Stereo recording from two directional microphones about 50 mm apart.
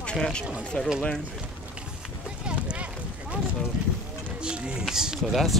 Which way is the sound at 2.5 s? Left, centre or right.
Right.